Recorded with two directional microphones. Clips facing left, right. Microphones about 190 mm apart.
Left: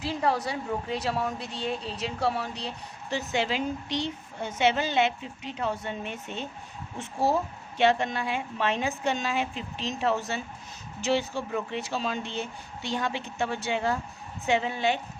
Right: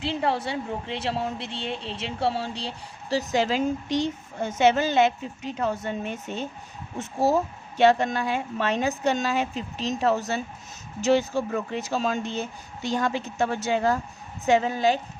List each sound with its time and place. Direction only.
0.0 s a woman's voice: 30° right (ahead or behind)